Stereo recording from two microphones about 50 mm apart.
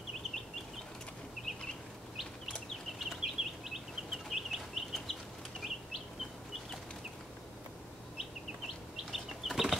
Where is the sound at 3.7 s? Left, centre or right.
Centre.